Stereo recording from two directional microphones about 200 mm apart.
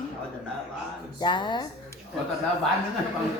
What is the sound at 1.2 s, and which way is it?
Speech, 25° left (ahead or behind).